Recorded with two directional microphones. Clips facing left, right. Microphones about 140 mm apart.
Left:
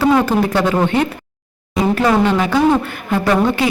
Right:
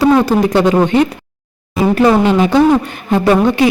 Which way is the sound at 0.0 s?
15° right (ahead or behind).